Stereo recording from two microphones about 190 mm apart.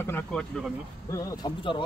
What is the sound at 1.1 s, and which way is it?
Speech, 15° left (ahead or behind).